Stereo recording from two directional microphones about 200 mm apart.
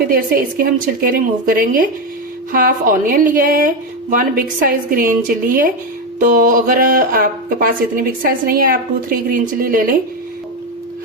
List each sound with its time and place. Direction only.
0.1 s a woman's voice: 45° right (ahead or behind)